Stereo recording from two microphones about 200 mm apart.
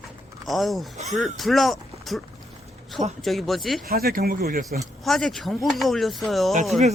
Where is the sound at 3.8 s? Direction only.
50° right (ahead or behind).